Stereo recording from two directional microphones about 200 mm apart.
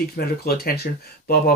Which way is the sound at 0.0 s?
50° left (ahead or behind).